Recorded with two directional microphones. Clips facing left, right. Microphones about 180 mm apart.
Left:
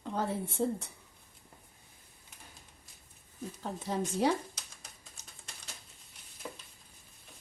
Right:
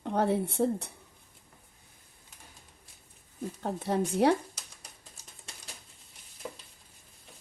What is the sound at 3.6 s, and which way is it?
Speech, 60° right (ahead or behind).